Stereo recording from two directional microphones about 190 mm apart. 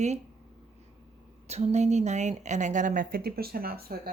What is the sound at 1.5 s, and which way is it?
A woman's voice, 35° right (ahead or behind).